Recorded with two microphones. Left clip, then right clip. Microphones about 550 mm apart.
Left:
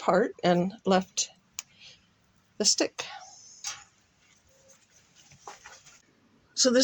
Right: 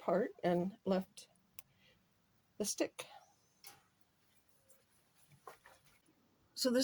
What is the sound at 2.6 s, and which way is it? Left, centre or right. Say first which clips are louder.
Speech: left 13 dB; right.